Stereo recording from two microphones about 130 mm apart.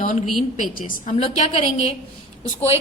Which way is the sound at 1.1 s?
50° left (ahead or behind).